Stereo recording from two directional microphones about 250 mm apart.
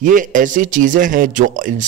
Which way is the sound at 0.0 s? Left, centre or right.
Right.